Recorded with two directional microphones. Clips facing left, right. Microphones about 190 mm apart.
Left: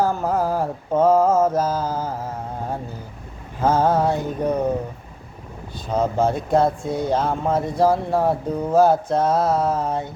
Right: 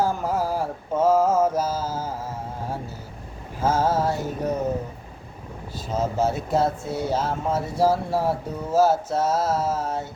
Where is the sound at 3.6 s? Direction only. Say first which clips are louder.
Left 3 dB; 60° left (ahead or behind).